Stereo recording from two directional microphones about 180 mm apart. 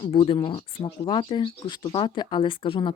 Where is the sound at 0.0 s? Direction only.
30° left (ahead or behind).